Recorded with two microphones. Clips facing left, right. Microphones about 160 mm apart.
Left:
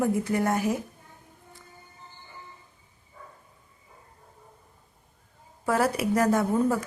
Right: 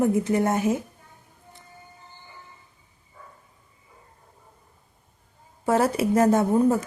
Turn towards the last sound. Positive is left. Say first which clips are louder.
# right 4 dB
turn(degrees=-25)  # may be behind; listen again after turning